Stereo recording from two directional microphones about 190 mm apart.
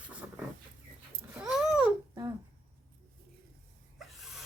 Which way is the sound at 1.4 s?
5° right (ahead or behind).